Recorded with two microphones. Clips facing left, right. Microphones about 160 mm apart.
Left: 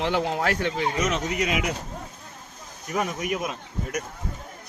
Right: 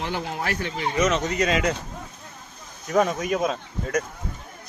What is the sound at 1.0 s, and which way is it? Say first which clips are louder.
Speech: right 4 dB; 80° right.